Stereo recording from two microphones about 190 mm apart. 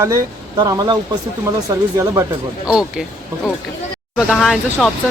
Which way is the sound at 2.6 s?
5° right (ahead or behind).